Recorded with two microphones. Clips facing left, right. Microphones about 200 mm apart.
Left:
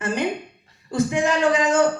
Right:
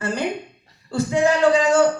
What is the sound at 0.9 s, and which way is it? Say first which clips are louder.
Speech: right 2 dB; 15° left (ahead or behind).